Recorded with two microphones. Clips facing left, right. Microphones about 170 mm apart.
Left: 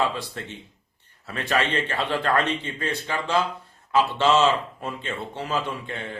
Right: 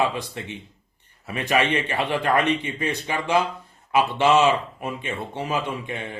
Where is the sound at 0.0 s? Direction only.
15° right (ahead or behind).